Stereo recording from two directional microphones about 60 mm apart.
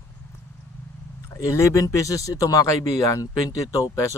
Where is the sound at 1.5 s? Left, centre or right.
Left.